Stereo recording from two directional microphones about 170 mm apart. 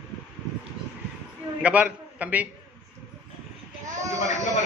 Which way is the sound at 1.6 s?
10° right (ahead or behind).